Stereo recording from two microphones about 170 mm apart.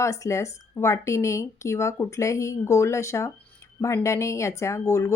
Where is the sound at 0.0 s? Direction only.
15° left (ahead or behind).